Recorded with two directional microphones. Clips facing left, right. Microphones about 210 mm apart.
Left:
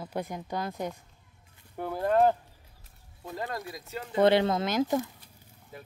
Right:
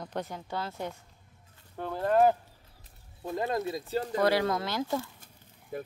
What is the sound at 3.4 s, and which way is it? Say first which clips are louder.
Speech: right 6 dB; 20° right (ahead or behind).